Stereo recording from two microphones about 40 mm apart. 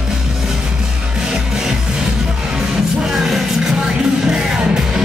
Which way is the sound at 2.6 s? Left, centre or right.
Centre.